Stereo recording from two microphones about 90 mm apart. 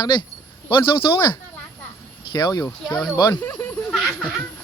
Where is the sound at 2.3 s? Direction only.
50° left (ahead or behind).